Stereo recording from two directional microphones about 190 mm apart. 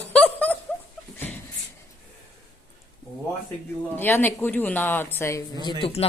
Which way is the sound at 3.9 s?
10° left (ahead or behind).